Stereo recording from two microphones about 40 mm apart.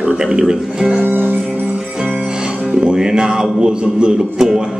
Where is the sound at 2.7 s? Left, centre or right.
Centre.